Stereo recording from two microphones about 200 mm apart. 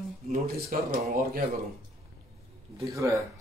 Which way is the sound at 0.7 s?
45° right (ahead or behind).